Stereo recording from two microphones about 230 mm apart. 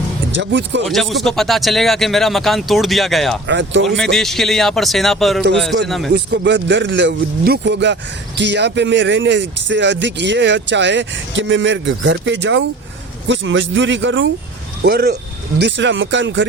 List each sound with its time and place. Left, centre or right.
0.3 s speech: right
0.9 s speech: centre
3.4 s speech: right
3.8 s speech: centre
6.1 s speech: right
14.8 s speech: right